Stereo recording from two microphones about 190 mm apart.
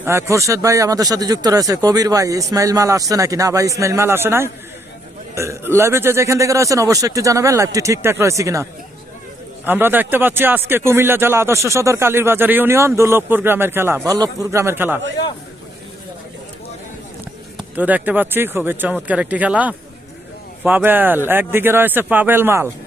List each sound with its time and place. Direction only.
0.0 s speech: 15° right (ahead or behind)
9.6 s speech: 10° right (ahead or behind)
17.7 s speech: 10° right (ahead or behind)